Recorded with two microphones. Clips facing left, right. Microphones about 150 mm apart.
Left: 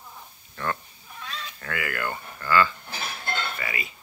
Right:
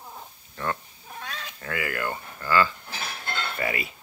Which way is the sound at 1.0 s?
55° right (ahead or behind).